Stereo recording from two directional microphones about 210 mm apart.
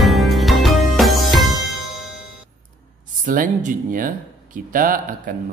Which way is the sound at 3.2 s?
40° right (ahead or behind).